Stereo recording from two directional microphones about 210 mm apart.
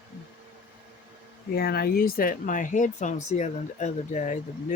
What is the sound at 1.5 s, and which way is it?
Speech, 50° left (ahead or behind).